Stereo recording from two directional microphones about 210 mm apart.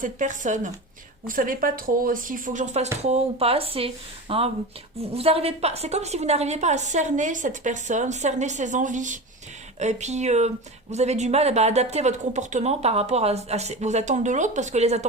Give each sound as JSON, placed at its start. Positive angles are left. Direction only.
{"t": 0.0, "sound": "speech", "side_deg": -35}